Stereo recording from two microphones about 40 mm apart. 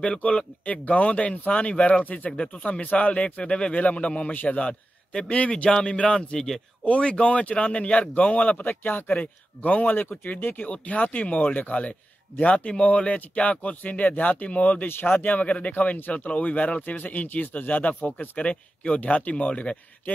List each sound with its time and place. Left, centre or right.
0.7 s speech: left
2.3 s speech: left
3.7 s speech: left
5.7 s speech: centre
6.9 s speech: left